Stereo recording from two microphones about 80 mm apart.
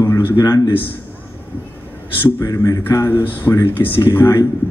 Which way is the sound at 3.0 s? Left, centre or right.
Left.